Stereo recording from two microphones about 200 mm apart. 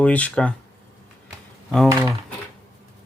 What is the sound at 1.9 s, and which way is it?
Speech, 15° right (ahead or behind).